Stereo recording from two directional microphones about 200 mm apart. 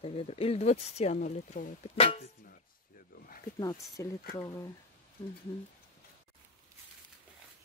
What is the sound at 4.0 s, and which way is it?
Speech, 15° left (ahead or behind).